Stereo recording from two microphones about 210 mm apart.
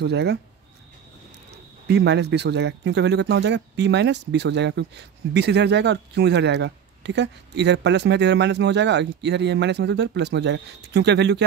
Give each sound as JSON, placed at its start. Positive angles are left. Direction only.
{"t": 0.0, "sound": "speech", "side_deg": -50}
{"t": 1.9, "sound": "speech", "side_deg": -55}